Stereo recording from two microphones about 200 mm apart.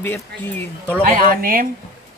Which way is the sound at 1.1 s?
45° right (ahead or behind).